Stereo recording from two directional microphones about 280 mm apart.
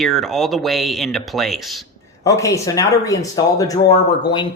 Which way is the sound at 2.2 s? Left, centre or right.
Centre.